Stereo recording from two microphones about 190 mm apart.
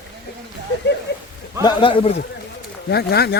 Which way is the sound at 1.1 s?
65° left (ahead or behind).